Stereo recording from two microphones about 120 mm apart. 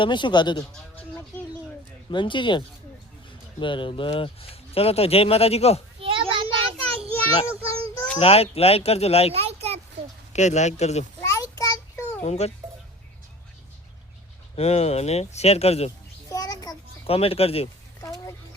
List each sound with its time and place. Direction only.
0.0 s speech: 40° left (ahead or behind)
2.0 s speech: 40° left (ahead or behind); by 5.8 s 60° left (ahead or behind)
6.0 s child singing: 50° right (ahead or behind)
8.2 s speech: 55° left (ahead or behind)
9.3 s a sound: 60° right (ahead or behind)
10.3 s speech: 70° left (ahead or behind)
11.2 s child singing: 25° left (ahead or behind)
12.2 s speech: 65° left (ahead or behind)
14.5 s speech: 65° left (ahead or behind)
16.3 s a sound: 30° left (ahead or behind)
17.1 s speech: 55° left (ahead or behind)
18.0 s a sound: 25° left (ahead or behind)